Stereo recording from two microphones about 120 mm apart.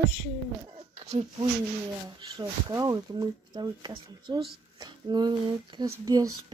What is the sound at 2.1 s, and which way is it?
Speech, 40° right (ahead or behind).